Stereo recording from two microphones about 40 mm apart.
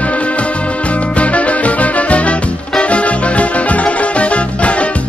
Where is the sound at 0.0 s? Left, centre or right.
Left.